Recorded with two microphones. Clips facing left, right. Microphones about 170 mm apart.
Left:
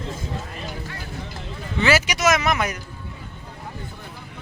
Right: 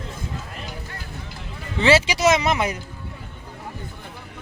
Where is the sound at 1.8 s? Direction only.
25° right (ahead or behind).